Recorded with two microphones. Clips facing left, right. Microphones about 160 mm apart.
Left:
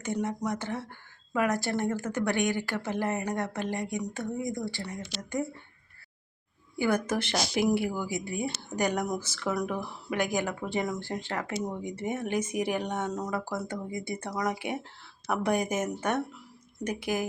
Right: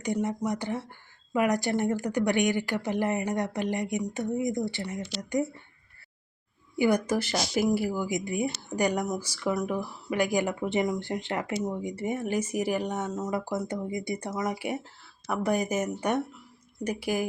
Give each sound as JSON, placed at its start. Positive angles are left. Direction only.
{"t": 0.0, "sound": "speech", "side_deg": -15}
{"t": 6.7, "sound": "speech", "side_deg": -15}
{"t": 8.0, "sound": "speech", "side_deg": -15}
{"t": 13.3, "sound": "speech", "side_deg": -20}